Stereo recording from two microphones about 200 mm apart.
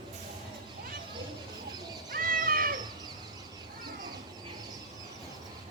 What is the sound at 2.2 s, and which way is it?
Cat, 45° right (ahead or behind).